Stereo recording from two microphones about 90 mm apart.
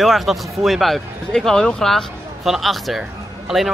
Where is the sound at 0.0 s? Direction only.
Centre (ahead or behind).